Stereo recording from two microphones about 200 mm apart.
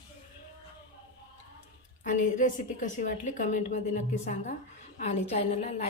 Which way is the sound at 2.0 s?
40° left (ahead or behind).